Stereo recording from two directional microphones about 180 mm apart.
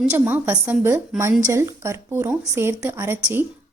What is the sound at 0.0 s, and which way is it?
A woman's voice, 10° right (ahead or behind).